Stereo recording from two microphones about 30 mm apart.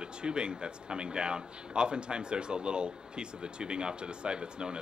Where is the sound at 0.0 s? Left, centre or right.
Right.